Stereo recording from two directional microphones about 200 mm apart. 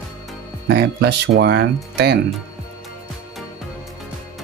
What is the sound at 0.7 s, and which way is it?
Speech, 55° right (ahead or behind).